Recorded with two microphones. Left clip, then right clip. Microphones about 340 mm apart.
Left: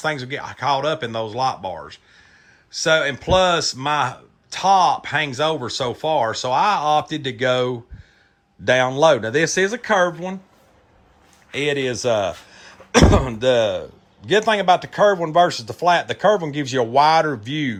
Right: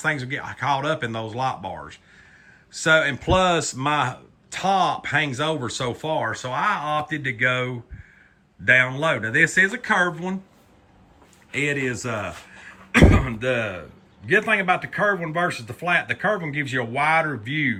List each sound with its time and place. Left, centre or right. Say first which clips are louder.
0.0 s speech: left 1 dB; centre
11.5 s speech: left 3 dB; centre